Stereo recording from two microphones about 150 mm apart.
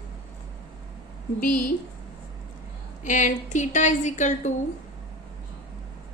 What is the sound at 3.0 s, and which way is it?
A woman's voice, 55° left (ahead or behind).